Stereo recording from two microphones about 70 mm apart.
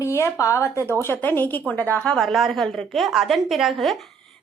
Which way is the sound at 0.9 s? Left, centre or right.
Left.